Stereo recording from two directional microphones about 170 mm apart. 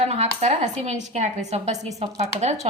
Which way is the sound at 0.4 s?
40° right (ahead or behind).